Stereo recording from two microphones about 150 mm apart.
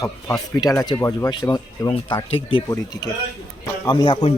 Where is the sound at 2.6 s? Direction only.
20° left (ahead or behind); by 4.4 s 40° left (ahead or behind).